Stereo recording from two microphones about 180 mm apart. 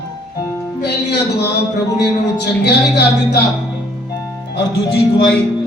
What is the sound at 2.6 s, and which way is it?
Speech, 65° left (ahead or behind).